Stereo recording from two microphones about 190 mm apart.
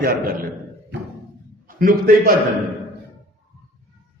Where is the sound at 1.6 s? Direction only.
50° right (ahead or behind).